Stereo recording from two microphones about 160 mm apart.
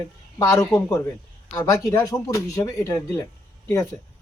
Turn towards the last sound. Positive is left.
turn(degrees=20)  # may be behind; listen again after turning